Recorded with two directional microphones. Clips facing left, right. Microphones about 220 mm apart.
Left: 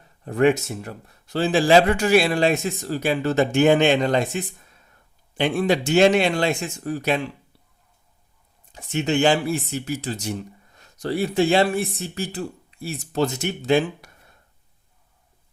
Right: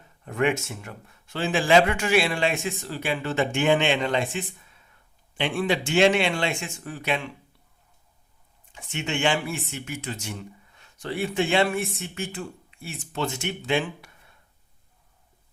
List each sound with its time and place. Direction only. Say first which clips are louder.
0.3 s speech: left 6 dB; 35° left (ahead or behind)
8.7 s speech: left 8 dB; 40° left (ahead or behind)